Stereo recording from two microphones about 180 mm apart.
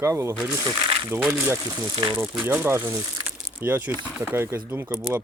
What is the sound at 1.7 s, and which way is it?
Speech, 20° right (ahead or behind).